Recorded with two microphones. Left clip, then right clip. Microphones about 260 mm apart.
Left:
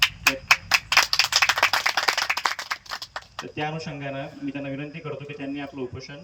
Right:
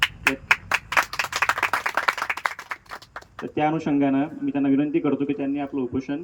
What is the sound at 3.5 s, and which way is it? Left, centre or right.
A man's voice, right.